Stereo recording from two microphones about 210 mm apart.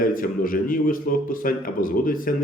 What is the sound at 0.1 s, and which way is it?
A man's voice, 40° left (ahead or behind).